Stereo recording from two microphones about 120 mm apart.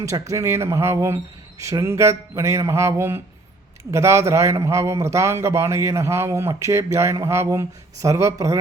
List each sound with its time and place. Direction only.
0.0 s a man's voice: 25° right (ahead or behind)